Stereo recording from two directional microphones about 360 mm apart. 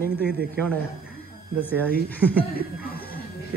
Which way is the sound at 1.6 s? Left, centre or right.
Centre.